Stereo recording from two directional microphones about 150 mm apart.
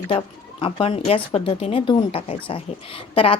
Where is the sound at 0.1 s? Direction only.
35° left (ahead or behind).